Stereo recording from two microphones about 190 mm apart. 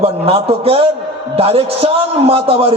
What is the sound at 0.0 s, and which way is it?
A man's voice, 30° right (ahead or behind).